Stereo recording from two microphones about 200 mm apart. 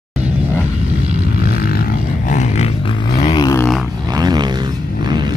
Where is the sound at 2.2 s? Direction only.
35° left (ahead or behind).